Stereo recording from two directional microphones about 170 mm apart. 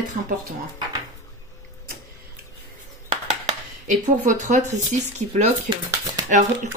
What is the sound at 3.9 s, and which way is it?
Speech, 45° right (ahead or behind).